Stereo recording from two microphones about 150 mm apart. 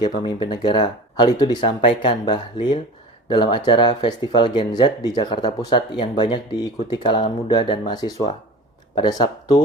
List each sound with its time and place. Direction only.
0.2 s speech: 30° left (ahead or behind)